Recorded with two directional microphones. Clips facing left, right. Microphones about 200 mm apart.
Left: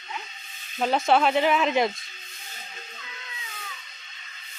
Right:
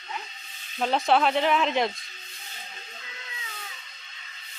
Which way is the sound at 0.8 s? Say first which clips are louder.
Left 1 dB; centre (ahead or behind).